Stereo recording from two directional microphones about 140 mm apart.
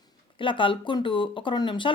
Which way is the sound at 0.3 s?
35° left (ahead or behind).